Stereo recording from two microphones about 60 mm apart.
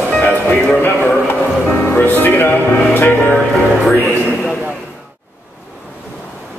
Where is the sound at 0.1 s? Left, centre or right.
Centre.